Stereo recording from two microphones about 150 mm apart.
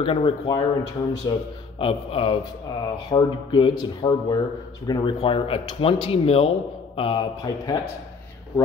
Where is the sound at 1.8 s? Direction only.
40° left (ahead or behind).